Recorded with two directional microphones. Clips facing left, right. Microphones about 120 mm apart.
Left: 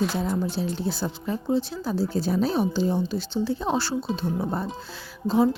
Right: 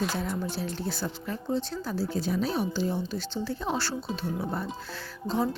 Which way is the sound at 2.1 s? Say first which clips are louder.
Left 4 dB; 35° left (ahead or behind).